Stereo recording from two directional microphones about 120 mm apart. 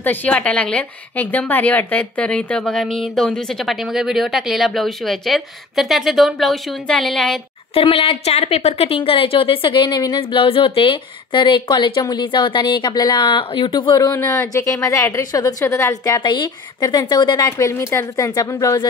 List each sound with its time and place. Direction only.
0.0 s a woman's voice: 15° left (ahead or behind)
7.7 s a woman's voice: 50° left (ahead or behind)
14.1 s a woman's voice: 25° left (ahead or behind)